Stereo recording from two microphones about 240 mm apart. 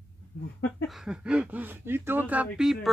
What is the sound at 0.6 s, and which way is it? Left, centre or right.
Speech, centre.